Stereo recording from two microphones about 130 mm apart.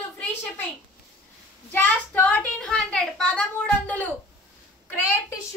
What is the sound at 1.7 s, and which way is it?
A child's voice, 15° left (ahead or behind).